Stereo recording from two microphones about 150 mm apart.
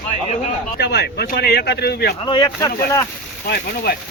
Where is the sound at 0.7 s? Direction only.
90° left.